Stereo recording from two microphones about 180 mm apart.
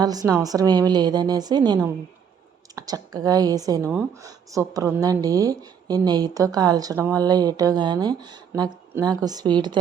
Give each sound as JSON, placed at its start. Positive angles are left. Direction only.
{"t": 0.0, "sound": "speech", "side_deg": -20}